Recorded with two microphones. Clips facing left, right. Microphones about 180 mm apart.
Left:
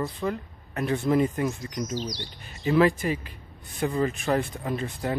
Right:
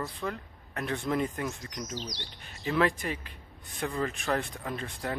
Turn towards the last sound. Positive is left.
turn(degrees=5)  # may be behind; listen again after turning